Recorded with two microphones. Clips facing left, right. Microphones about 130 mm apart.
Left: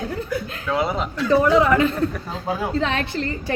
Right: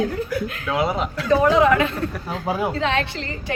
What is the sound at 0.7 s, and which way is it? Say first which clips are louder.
A man's voice: even; centre (ahead or behind).